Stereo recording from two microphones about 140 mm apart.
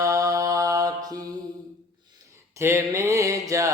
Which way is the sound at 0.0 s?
25° right (ahead or behind).